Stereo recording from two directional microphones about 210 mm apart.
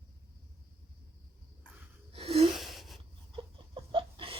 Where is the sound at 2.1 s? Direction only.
30° right (ahead or behind).